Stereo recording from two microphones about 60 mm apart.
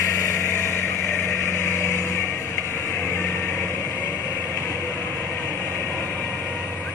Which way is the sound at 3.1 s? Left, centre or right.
Left.